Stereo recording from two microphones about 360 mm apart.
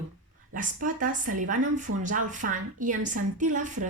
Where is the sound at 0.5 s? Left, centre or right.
Right.